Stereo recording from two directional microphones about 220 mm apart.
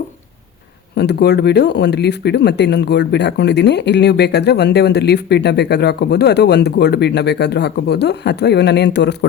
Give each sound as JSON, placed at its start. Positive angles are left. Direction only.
{"t": 0.9, "sound": "speech", "side_deg": 50}